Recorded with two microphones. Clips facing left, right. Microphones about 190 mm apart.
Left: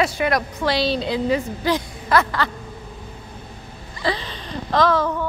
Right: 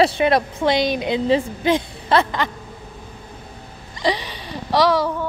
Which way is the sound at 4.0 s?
15° right (ahead or behind).